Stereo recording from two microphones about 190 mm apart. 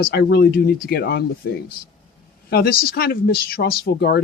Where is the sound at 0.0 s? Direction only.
55° left (ahead or behind).